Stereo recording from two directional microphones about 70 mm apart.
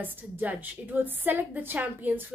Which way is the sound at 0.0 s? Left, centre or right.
Right.